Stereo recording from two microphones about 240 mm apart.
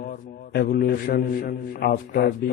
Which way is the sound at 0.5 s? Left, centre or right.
Left.